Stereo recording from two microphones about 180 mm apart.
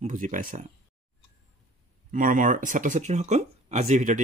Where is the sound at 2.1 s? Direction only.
50° right (ahead or behind).